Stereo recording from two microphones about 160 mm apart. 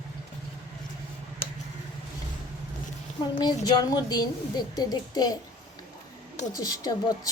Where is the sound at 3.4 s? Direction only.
25° left (ahead or behind).